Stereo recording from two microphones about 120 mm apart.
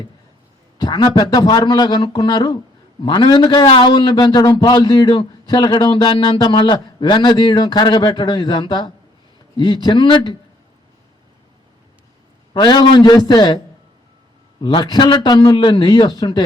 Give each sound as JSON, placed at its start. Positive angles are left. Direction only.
{"t": 0.8, "sound": "a man's voice", "side_deg": 35}
{"t": 12.5, "sound": "a man's voice", "side_deg": 40}
{"t": 14.8, "sound": "a man's voice", "side_deg": 35}